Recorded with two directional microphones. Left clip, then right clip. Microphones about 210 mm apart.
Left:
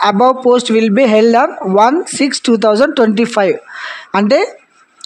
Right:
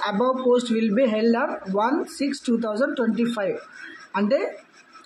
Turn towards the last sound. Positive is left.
turn(degrees=50)  # may be behind; listen again after turning